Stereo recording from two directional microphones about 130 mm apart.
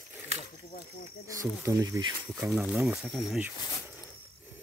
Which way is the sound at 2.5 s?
5° right (ahead or behind).